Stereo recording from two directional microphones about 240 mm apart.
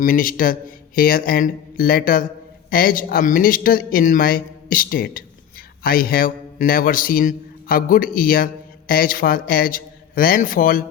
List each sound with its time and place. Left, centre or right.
0.0 s a man's voice: left